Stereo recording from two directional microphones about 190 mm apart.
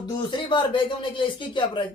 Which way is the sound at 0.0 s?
25° left (ahead or behind).